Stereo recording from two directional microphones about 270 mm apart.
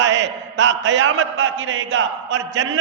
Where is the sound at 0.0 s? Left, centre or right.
Right.